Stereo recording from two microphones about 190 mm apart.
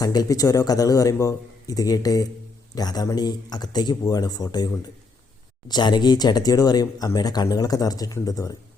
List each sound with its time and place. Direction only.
0.0 s speech: 20° left (ahead or behind)